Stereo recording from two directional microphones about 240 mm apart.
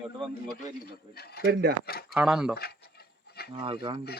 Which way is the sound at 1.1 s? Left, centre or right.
Left.